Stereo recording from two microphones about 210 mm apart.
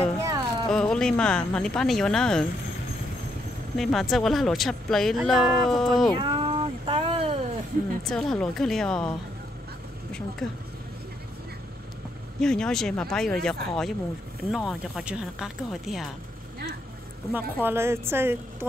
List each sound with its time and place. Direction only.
0.2 s a sound: 15° right (ahead or behind)
0.7 s speech: 5° left (ahead or behind)
3.7 s speech: centre (ahead or behind)
6.1 s cat: 25° right (ahead or behind)
8.0 s speech: centre (ahead or behind)
10.4 s speech: centre (ahead or behind)
12.4 s speech: 5° left (ahead or behind)
17.3 s speech: 10° right (ahead or behind)